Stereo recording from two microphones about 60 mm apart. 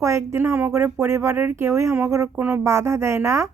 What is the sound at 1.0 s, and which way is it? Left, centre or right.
Speech, right.